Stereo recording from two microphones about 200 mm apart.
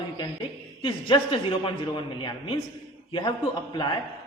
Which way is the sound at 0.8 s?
25° left (ahead or behind).